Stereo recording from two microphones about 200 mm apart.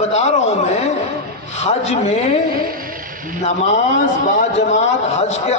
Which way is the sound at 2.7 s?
45° right (ahead or behind).